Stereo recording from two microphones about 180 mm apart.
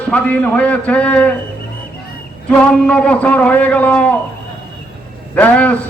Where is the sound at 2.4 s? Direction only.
5° left (ahead or behind).